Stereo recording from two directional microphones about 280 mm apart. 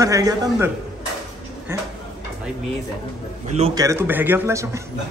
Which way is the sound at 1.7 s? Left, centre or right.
Centre.